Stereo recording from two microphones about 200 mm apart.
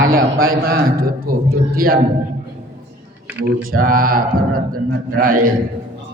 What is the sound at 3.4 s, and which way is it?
A man's voice, 45° right (ahead or behind).